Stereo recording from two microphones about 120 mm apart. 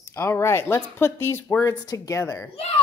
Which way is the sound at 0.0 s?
20° left (ahead or behind).